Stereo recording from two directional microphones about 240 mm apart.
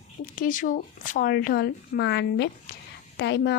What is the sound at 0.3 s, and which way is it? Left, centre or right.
A woman's voice, left.